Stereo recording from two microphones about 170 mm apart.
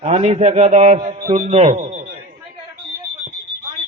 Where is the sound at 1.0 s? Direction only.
30° right (ahead or behind).